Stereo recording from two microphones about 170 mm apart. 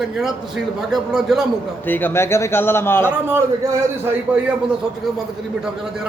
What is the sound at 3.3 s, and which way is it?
Speech, 15° right (ahead or behind).